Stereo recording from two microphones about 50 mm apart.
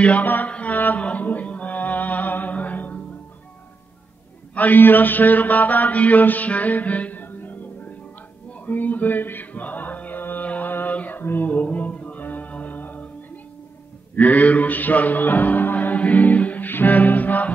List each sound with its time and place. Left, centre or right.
0.0 s mantra: left
1.0 s music: left
4.6 s mantra: left
8.5 s chant: left
10.7 s mantra: left
11.0 s music: left
14.1 s music: left